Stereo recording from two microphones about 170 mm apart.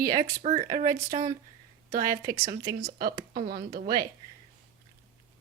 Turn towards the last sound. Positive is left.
turn(degrees=-60)  # may be behind; listen again after turning